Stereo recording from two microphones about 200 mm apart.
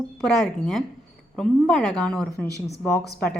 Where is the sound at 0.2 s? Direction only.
Centre (ahead or behind).